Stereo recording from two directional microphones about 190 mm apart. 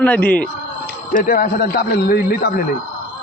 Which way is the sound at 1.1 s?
45° left (ahead or behind).